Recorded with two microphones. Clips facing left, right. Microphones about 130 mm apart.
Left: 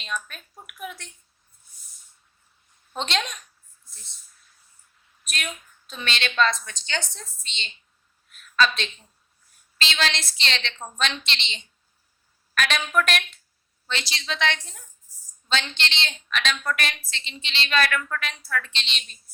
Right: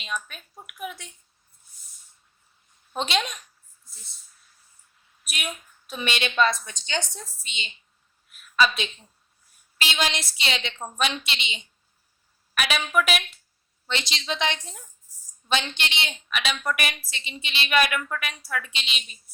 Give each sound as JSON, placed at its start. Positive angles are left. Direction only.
{"t": 0.0, "sound": "speech", "side_deg": -5}
{"t": 2.9, "sound": "speech", "side_deg": -5}
{"t": 5.2, "sound": "a woman's voice", "side_deg": -10}
{"t": 13.8, "sound": "a woman's voice", "side_deg": -20}